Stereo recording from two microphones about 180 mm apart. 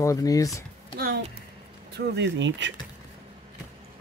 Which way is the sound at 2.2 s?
85° right.